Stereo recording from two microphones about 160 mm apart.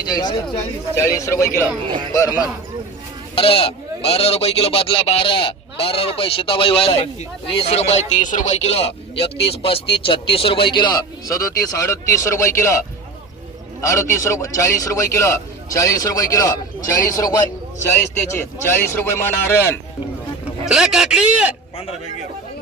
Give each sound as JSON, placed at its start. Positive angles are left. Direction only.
{"t": 0.1, "sound": "a man's voice", "side_deg": 25}
{"t": 3.3, "sound": "speech", "side_deg": 35}
{"t": 13.8, "sound": "a man's voice", "side_deg": 20}
{"t": 20.7, "sound": "a man's voice", "side_deg": -5}